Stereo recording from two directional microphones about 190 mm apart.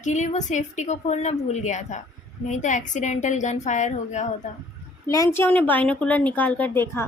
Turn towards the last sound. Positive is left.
turn(degrees=10)  # may be behind; listen again after turning